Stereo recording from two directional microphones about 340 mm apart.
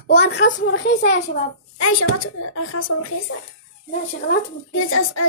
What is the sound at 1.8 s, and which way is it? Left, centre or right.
Speech, left.